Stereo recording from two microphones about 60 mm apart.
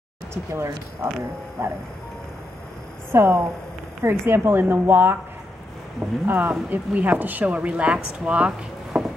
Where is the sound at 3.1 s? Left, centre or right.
Right.